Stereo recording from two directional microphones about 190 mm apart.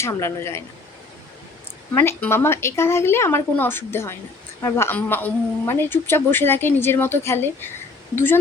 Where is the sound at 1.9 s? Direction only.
15° left (ahead or behind).